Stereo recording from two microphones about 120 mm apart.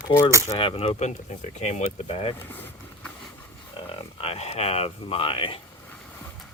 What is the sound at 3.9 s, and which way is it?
Speech, 55° left (ahead or behind).